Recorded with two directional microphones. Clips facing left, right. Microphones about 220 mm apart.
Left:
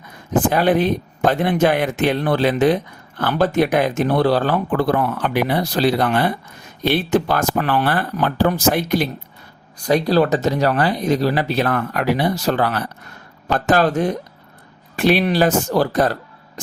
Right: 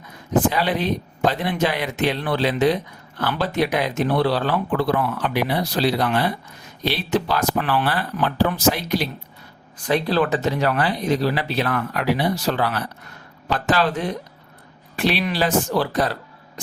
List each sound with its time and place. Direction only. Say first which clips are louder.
0.5 s speech: left 6 dB; 50° left (ahead or behind)
9.8 s speech: left 4 dB; 40° left (ahead or behind)